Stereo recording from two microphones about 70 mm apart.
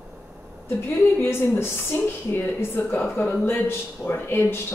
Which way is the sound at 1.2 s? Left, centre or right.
Left.